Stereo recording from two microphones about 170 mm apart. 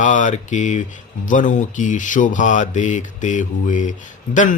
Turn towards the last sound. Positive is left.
turn(degrees=50)  # may be behind; listen again after turning